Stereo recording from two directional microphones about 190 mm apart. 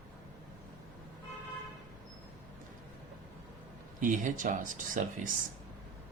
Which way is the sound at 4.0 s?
45° right (ahead or behind).